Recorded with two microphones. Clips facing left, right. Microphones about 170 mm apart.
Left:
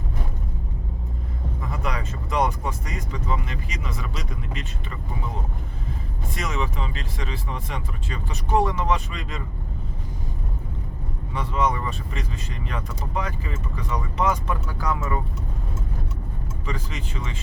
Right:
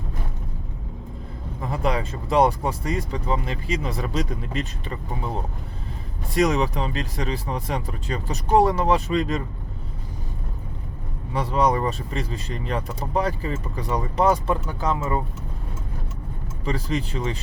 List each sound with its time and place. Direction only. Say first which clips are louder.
1.6 s speech: right 6 dB; 30° right (ahead or behind)
6.3 s speech: right 9 dB; 35° right (ahead or behind)
11.3 s speech: right 4 dB; 35° right (ahead or behind)
16.6 s speech: right 8 dB; 35° right (ahead or behind)